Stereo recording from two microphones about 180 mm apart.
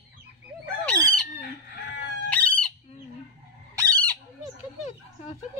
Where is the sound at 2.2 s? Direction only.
10° left (ahead or behind).